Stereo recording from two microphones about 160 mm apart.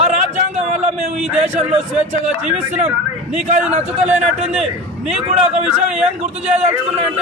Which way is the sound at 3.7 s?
45° right (ahead or behind).